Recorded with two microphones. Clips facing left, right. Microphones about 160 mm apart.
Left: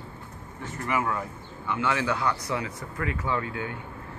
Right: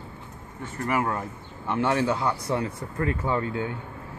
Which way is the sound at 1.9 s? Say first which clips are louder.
Right 3 dB; 25° right (ahead or behind).